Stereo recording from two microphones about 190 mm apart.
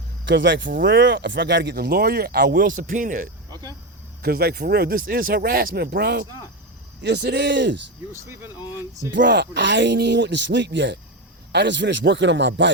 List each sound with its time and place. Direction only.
0.3 s speech: 70° right (ahead or behind); by 3.2 s 45° right (ahead or behind)
3.5 s speech: 20° right (ahead or behind)
4.2 s speech: 55° right (ahead or behind)
8.1 s speech: 10° right (ahead or behind)
9.1 s speech: 65° right (ahead or behind)